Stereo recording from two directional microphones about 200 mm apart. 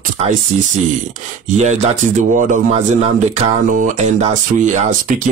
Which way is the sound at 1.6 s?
35° right (ahead or behind).